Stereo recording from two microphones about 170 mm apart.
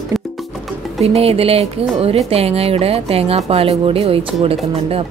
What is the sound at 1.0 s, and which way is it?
Speech, 35° right (ahead or behind).